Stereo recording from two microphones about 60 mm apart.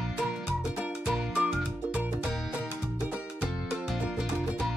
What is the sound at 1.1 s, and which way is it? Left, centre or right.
Music, centre.